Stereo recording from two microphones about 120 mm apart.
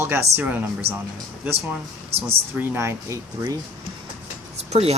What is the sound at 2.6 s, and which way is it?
Speech, 20° right (ahead or behind).